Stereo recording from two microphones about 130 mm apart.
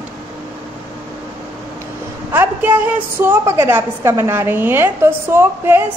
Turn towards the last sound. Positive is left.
turn(degrees=-20)  # may be behind; listen again after turning